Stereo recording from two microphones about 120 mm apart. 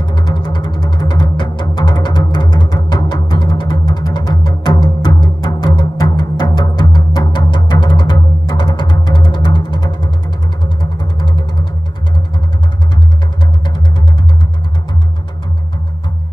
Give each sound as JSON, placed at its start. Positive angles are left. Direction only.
{"t": 0.0, "sound": "music", "side_deg": 40}